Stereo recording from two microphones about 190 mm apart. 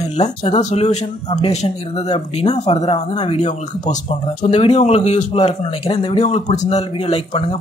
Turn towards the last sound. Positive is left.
turn(degrees=30)  # may be behind; listen again after turning